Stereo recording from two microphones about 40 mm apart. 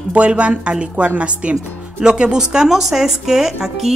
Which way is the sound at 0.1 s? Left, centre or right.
Right.